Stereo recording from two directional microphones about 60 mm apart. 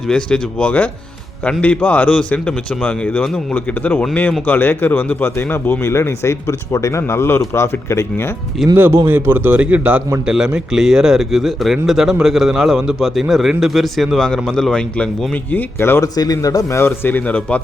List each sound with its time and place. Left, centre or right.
0.1 s a man's voice: centre; by 5.7 s left
5.8 s speech: left
8.7 s a man's voice: right
10.2 s a man's voice: centre
15.8 s speech: left
16.1 s a man's voice: left
16.7 s speech: left
17.2 s a man's voice: left